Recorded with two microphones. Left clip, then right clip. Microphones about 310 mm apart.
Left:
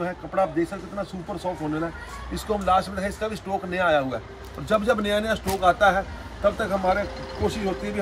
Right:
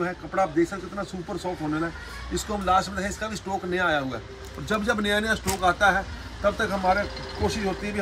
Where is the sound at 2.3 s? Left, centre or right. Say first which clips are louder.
Left 1 dB; centre.